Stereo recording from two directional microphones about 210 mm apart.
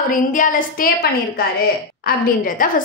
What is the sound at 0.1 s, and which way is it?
A woman's voice, 40° left (ahead or behind).